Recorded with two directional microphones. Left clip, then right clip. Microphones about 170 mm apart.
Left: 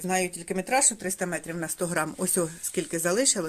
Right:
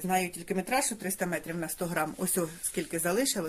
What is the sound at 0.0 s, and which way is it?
Speech, 30° left (ahead or behind).